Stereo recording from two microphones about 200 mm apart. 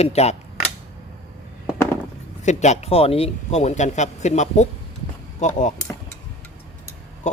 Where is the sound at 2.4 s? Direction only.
35° left (ahead or behind).